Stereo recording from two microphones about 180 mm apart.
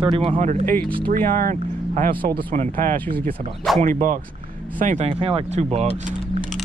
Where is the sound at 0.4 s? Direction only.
45° right (ahead or behind).